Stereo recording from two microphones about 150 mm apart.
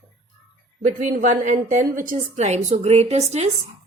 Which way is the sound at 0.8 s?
65° right (ahead or behind).